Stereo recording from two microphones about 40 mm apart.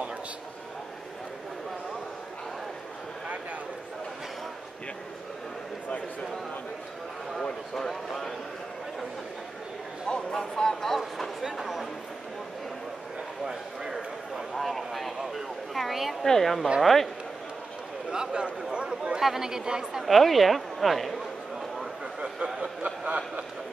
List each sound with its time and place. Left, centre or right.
7.9 s a man's voice: centre
10.0 s a sound: centre
11.4 s a man's voice: centre
13.5 s a sound: centre
14.5 s a man's voice: centre
18.1 s speech: right
19.1 s speech: centre
20.1 s a sound: centre
23.0 s speech: right